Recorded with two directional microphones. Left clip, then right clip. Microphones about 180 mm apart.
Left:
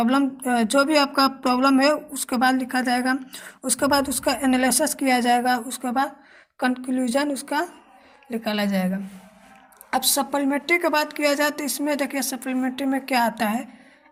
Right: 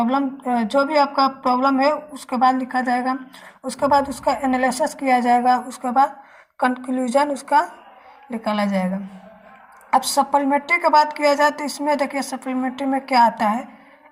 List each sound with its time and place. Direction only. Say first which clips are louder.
0.1 s a woman's voice: right 1 dB; 50° left (ahead or behind); by 8.9 s 25° left (ahead or behind)
9.9 s a woman's voice: right 6 dB; 25° left (ahead or behind)